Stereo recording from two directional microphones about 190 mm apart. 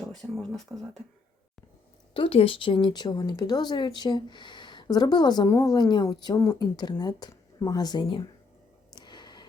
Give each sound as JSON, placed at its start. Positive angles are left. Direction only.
{"t": 0.2, "sound": "speech", "side_deg": 0}
{"t": 2.1, "sound": "speech", "side_deg": 30}
{"t": 9.0, "sound": "a sound", "side_deg": 25}